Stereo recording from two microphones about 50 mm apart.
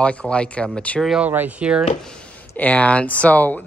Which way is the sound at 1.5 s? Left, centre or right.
Right.